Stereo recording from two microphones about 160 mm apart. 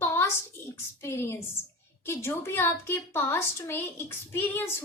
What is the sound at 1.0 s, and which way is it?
A woman's voice, 15° left (ahead or behind).